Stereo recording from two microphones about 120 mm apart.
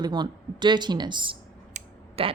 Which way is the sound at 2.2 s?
55° right (ahead or behind).